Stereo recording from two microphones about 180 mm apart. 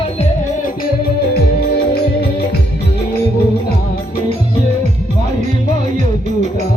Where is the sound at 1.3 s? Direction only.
60° left (ahead or behind).